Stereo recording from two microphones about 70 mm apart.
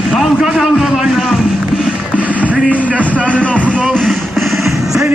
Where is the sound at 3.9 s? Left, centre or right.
Centre.